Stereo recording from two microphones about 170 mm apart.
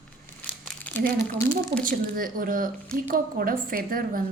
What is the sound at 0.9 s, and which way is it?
Crumpling, 10° left (ahead or behind).